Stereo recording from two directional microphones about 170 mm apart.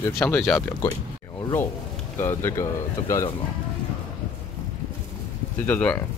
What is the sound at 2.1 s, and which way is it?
Speech, 15° left (ahead or behind).